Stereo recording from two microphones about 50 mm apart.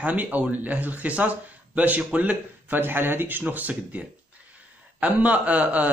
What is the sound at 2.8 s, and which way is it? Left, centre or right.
Speech, right.